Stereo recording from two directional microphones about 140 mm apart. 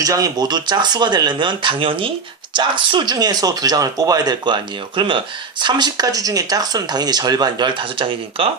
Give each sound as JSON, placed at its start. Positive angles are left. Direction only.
{"t": 0.0, "sound": "speech", "side_deg": -25}